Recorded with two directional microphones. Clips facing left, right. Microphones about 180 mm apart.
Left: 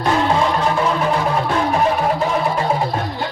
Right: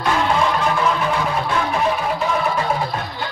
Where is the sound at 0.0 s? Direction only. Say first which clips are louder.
Left 2 dB; 30° left (ahead or behind).